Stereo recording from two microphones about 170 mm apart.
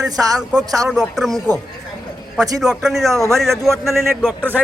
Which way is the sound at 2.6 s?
Centre (ahead or behind).